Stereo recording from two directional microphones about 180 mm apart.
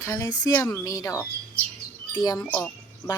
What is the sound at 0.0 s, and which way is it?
Speech, 20° left (ahead or behind).